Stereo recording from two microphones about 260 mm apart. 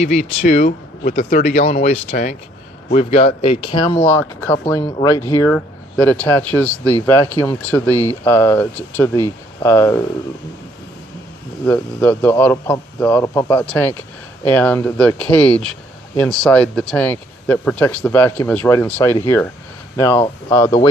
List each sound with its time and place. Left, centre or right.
0.0 s speech: left; by 10.0 s centre
11.6 s speech: centre